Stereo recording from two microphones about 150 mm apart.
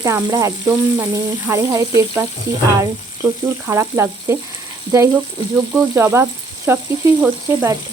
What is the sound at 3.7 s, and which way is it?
Speech, 20° right (ahead or behind).